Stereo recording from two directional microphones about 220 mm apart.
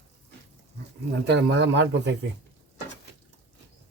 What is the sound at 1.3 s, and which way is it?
Speech, 55° right (ahead or behind).